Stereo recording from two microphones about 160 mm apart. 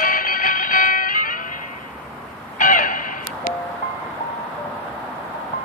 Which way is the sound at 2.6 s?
55° left (ahead or behind).